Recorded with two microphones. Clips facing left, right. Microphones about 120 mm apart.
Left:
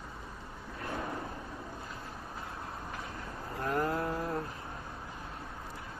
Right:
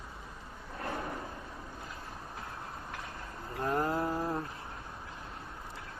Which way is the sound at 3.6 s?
25° right (ahead or behind).